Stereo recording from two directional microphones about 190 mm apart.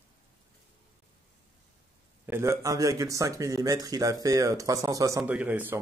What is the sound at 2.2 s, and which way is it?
Speech, 15° right (ahead or behind).